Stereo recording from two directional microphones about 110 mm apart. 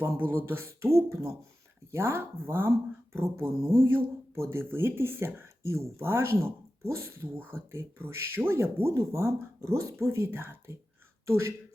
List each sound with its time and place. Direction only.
0.3 s speech: 20° right (ahead or behind)